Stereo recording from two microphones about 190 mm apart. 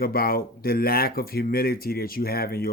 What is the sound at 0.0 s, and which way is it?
Speech, 50° left (ahead or behind).